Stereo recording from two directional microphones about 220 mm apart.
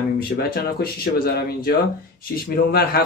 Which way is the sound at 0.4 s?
45° left (ahead or behind).